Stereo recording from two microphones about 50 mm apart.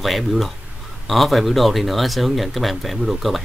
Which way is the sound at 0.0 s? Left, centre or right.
Centre.